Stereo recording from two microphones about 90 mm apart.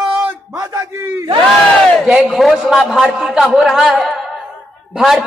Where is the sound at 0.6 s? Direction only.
35° right (ahead or behind).